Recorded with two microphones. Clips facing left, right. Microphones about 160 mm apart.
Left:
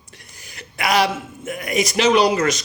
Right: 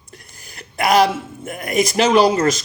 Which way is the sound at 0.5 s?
45° right (ahead or behind).